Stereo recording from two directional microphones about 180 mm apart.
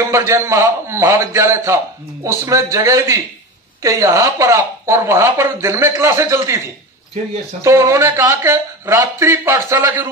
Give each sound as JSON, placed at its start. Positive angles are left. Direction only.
{"t": 0.0, "sound": "speech", "side_deg": -15}
{"t": 7.6, "sound": "speech", "side_deg": -15}